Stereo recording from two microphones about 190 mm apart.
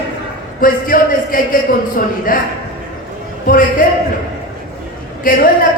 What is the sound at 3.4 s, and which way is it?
Speech, 45° left (ahead or behind).